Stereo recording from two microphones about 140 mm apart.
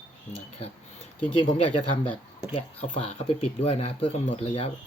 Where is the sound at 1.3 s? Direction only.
40° left (ahead or behind).